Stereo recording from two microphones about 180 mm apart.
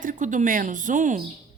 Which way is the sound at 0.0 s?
45° right (ahead or behind).